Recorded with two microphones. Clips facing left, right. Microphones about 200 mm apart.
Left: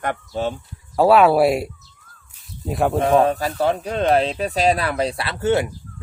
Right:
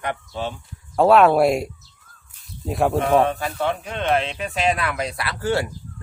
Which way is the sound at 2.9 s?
35° left (ahead or behind).